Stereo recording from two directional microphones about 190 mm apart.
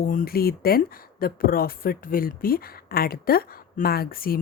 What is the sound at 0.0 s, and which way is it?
Speech, 50° left (ahead or behind).